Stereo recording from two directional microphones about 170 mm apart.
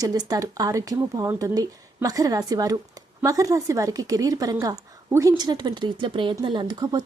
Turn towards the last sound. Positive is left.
turn(degrees=-25)  # may be behind; listen again after turning